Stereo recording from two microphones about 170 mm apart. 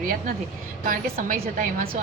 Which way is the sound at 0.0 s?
55° right (ahead or behind).